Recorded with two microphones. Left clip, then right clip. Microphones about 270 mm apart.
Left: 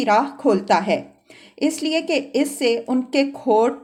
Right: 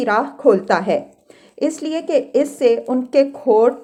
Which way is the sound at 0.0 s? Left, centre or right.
Centre.